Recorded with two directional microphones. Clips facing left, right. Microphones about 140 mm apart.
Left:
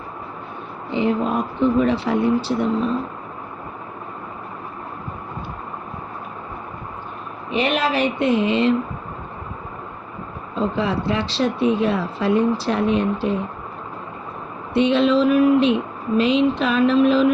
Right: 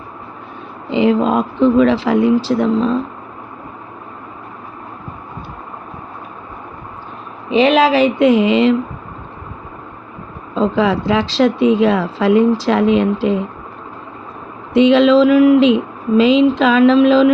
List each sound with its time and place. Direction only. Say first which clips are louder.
0.9 s speech: right 7 dB; 90° right
7.5 s speech: right 9 dB; 90° right
10.5 s speech: right 7 dB; 90° right
14.7 s speech: right 7 dB; 90° right